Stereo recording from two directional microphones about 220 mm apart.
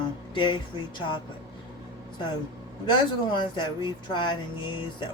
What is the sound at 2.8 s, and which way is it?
Speech, 20° left (ahead or behind).